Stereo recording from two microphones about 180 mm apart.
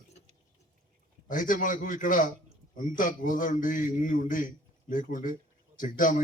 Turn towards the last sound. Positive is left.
turn(degrees=50)  # may be behind; listen again after turning